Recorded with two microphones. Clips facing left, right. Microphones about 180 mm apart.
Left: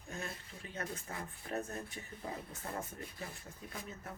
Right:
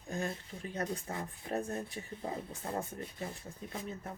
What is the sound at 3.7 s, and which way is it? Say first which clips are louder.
Speech: right 5 dB; 30° right (ahead or behind).